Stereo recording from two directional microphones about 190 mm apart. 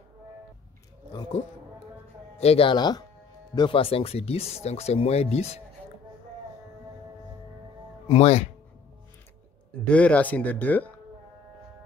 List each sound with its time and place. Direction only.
1.1 s a sound: 25° left (ahead or behind)
2.3 s speech: 30° left (ahead or behind)
8.1 s speech: 35° left (ahead or behind)
9.8 s speech: 5° left (ahead or behind)